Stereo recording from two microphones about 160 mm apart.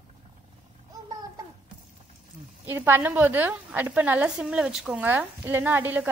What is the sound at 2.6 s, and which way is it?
A woman's voice, 15° right (ahead or behind).